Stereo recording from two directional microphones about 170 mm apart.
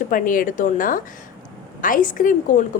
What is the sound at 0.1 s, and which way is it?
Speech, 55° left (ahead or behind).